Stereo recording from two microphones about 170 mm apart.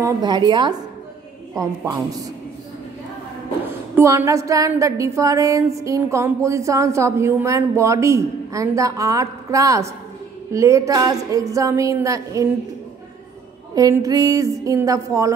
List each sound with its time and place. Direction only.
0.0 s a woman's voice: 25° right (ahead or behind)
3.9 s a woman's voice: 15° right (ahead or behind)
13.7 s a woman's voice: 20° right (ahead or behind)